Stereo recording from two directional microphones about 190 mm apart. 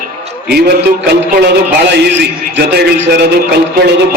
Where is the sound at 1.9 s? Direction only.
65° right (ahead or behind).